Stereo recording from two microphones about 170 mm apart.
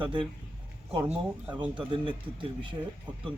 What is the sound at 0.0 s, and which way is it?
Speech, 30° right (ahead or behind).